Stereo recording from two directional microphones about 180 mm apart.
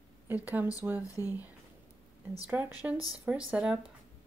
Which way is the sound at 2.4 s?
10° right (ahead or behind).